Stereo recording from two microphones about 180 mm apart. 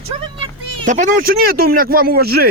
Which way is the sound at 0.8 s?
45° right (ahead or behind).